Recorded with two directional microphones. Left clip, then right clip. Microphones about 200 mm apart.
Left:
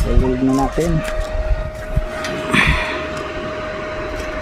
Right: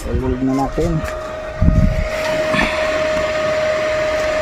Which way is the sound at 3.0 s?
55° right (ahead or behind).